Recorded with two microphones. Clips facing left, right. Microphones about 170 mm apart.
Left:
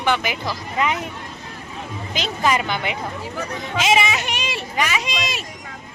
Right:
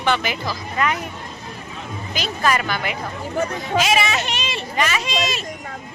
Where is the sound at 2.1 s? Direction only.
20° left (ahead or behind).